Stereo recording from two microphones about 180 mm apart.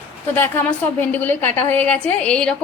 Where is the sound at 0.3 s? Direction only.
10° left (ahead or behind).